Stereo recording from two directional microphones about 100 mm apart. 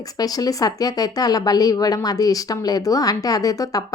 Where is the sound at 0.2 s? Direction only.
40° left (ahead or behind).